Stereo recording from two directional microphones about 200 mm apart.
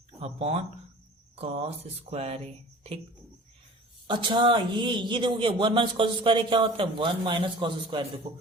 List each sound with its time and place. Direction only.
0.2 s a man's voice: 30° right (ahead or behind)
4.0 s a man's voice: 25° right (ahead or behind)